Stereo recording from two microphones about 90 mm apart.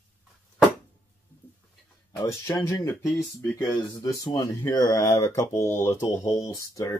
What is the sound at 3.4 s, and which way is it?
Speech, 25° left (ahead or behind).